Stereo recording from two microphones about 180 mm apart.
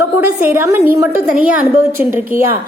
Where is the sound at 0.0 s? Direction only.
10° right (ahead or behind).